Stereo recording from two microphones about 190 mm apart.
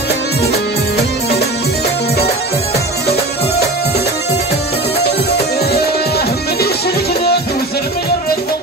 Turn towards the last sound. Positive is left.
turn(degrees=55)  # may be behind; listen again after turning